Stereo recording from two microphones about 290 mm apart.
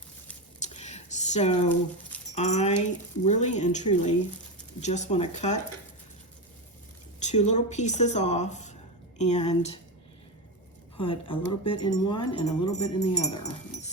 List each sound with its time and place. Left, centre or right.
0.6 s a sound: left
2.3 s speech: left
7.2 s speech: left
10.9 s speech: centre